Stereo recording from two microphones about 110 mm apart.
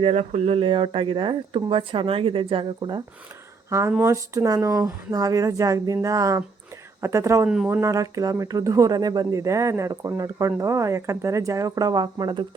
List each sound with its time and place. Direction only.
0.0 s speech: 75° right (ahead or behind); by 3.0 s 50° right (ahead or behind)
3.7 s speech: 25° right (ahead or behind)
7.4 s speech: 5° right (ahead or behind)
7.7 s speech: 30° right (ahead or behind)